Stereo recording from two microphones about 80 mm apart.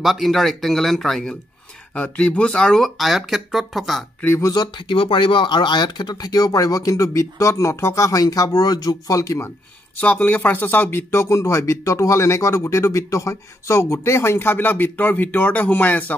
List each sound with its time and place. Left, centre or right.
0.0 s speech: centre
2.0 s speech: centre
4.4 s speech: left
4.7 s speech: left
9.9 s speech: centre